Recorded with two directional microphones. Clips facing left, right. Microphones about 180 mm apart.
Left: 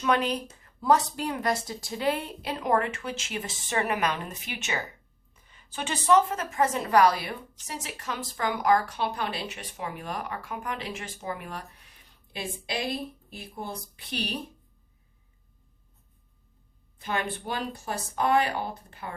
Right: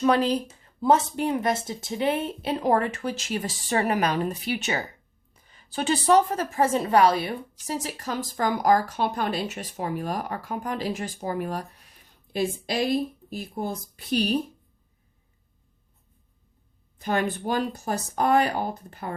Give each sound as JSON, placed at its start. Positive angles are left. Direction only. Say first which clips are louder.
{"t": 0.0, "sound": "a woman's voice", "louder": "right 4 dB", "side_deg": -35}
{"t": 17.0, "sound": "a woman's voice", "louder": "right 5 dB", "side_deg": -45}